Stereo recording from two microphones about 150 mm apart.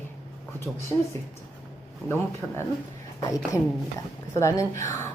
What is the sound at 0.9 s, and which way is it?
Speech, 25° left (ahead or behind).